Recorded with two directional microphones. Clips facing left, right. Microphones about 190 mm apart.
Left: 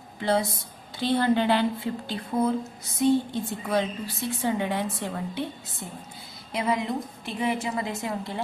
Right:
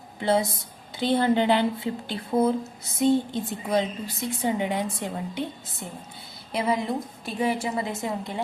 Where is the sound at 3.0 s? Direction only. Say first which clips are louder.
Right 1 dB; 20° right (ahead or behind).